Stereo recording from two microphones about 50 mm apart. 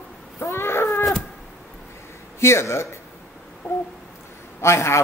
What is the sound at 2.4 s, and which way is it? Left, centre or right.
Speech, left.